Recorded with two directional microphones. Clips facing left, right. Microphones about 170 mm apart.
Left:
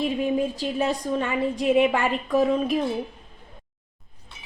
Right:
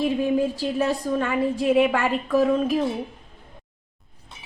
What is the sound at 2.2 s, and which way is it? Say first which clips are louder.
Speech: right 1 dB; 15° left (ahead or behind).